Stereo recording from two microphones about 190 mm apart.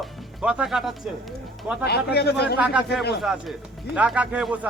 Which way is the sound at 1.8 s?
60° left (ahead or behind).